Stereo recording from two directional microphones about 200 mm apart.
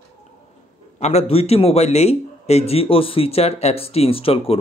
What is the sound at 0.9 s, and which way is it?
Speech, 30° left (ahead or behind).